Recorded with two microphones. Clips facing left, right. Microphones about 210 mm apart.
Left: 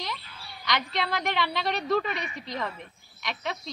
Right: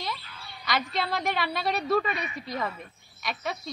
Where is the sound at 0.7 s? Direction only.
5° right (ahead or behind).